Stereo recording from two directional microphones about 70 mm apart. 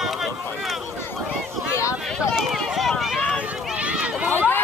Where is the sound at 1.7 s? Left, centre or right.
Left.